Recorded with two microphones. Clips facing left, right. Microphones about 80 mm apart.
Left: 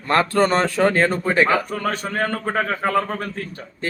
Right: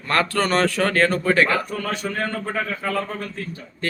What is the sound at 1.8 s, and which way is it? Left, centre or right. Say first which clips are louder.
A man's voice: left 3 dB; left.